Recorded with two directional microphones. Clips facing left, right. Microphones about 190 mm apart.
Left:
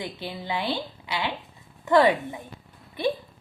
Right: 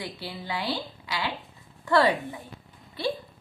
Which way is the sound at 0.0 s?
20° left (ahead or behind).